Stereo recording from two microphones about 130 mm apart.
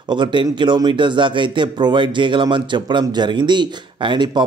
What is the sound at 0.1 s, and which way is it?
A man's voice, 35° right (ahead or behind).